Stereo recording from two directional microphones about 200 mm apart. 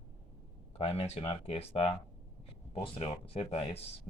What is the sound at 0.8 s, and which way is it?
Speech, 30° left (ahead or behind).